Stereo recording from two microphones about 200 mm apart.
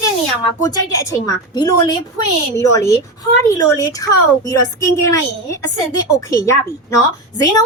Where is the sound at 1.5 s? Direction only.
20° left (ahead or behind).